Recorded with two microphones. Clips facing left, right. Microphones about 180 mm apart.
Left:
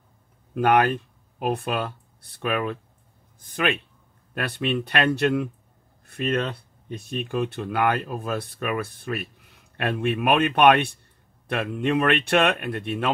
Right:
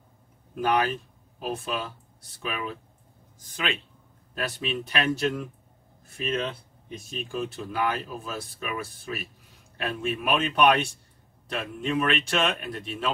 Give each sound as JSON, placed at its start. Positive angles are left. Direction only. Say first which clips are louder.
{"t": 0.6, "sound": "speech", "louder": "left 5 dB", "side_deg": 60}